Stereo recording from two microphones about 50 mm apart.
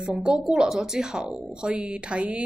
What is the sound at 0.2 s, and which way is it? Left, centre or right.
A woman's voice, centre.